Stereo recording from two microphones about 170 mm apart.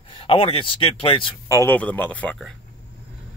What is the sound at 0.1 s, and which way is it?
Speech, 30° left (ahead or behind).